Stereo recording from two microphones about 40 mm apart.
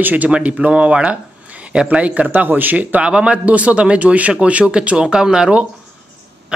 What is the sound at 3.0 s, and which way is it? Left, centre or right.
Speech, right.